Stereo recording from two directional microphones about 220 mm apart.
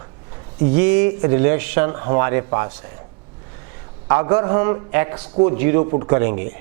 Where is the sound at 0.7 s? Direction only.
10° right (ahead or behind).